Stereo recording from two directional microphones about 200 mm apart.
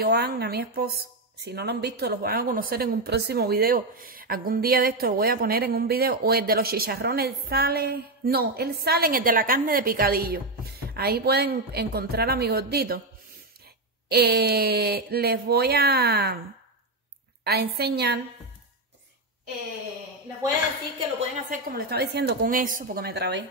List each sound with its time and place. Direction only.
0.0 s a woman's voice: 55° right (ahead or behind)
14.0 s a woman's voice: 50° right (ahead or behind)
17.4 s a woman's voice: 55° right (ahead or behind)
21.5 s a woman's voice: 50° right (ahead or behind)